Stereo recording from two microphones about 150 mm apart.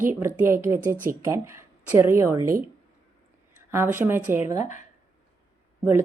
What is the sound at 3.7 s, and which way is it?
Speech, 15° right (ahead or behind).